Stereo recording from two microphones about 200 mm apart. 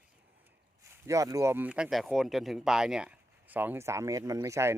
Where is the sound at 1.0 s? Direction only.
15° right (ahead or behind).